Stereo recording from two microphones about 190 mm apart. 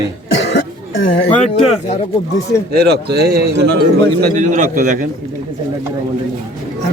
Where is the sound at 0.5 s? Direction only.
70° left (ahead or behind).